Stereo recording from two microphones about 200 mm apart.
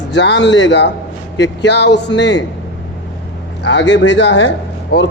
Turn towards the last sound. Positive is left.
turn(degrees=55)  # may be behind; listen again after turning